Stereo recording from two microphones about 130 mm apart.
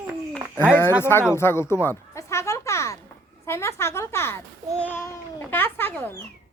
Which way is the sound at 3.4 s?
20° left (ahead or behind).